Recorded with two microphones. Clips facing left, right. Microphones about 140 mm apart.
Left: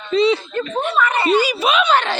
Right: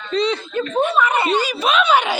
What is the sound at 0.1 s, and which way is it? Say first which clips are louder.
Speech: left 4 dB; 5° left (ahead or behind).